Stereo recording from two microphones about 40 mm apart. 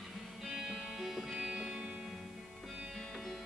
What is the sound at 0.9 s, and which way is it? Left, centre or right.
Music, centre.